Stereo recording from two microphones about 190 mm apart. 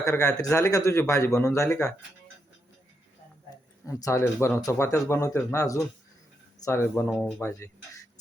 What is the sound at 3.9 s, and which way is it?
A man's voice, 15° left (ahead or behind).